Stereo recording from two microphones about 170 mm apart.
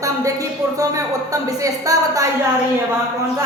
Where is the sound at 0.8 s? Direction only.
20° right (ahead or behind).